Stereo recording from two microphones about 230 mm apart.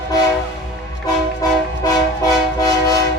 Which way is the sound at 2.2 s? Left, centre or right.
Centre.